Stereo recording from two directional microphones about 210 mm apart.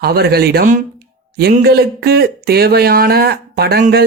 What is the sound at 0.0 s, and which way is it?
A man's voice, 50° right (ahead or behind).